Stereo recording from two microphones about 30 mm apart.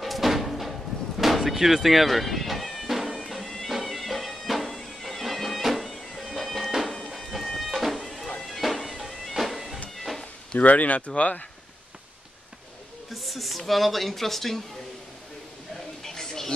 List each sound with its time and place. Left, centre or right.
0.0 s slam: centre
1.4 s music: centre
2.9 s music: centre
4.7 s bagpipes: centre
6.3 s music: centre
10.6 s speech: left
13.1 s speech: centre
16.0 s a sound: centre